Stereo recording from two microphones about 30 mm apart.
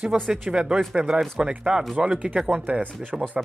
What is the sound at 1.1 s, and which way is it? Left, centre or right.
Speech, right.